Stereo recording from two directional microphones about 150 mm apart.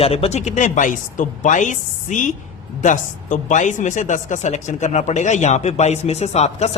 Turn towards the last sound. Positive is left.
turn(degrees=45)  # may be behind; listen again after turning